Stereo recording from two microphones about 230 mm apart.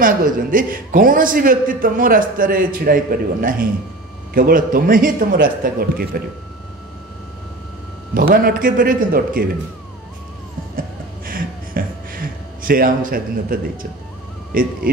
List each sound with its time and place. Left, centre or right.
0.0 s a man's voice: right
8.1 s a man's voice: right
11.2 s a sound: right
12.6 s a man's voice: right